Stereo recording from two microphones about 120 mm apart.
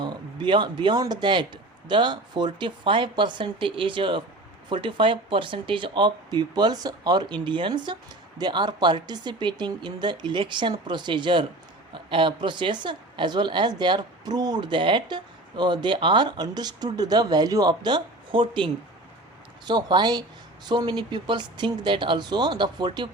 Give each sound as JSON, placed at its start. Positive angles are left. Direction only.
{"t": 0.0, "sound": "a woman's voice", "side_deg": -40}